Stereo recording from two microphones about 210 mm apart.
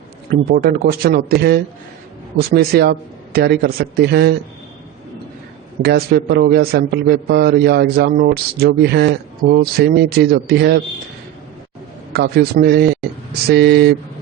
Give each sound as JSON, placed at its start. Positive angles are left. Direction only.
{"t": 0.3, "sound": "a man's voice", "side_deg": -45}
{"t": 5.8, "sound": "a man's voice", "side_deg": -50}
{"t": 12.1, "sound": "a man's voice", "side_deg": -50}